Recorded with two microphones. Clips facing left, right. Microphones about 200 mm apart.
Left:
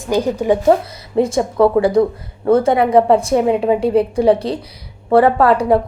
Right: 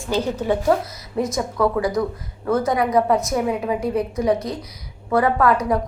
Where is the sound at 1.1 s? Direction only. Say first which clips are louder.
Left 7 dB; 30° left (ahead or behind).